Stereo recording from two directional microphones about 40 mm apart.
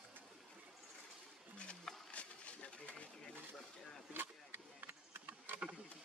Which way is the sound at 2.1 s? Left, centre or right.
Left.